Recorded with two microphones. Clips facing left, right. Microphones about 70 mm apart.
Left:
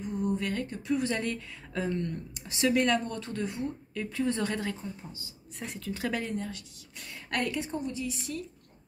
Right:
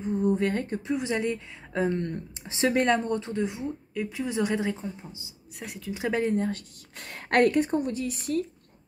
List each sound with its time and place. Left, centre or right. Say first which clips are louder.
0.0 s a sound: right 6 dB; right
0.3 s speech: right 6 dB; right
0.9 s a woman's voice: right 1 dB; centre
5.6 s speech: right 1 dB; centre
5.9 s a woman's voice: right 7 dB; right
6.3 s a woman's voice: right 8 dB; right